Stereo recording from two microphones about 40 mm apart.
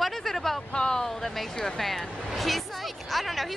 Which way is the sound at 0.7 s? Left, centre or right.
Left.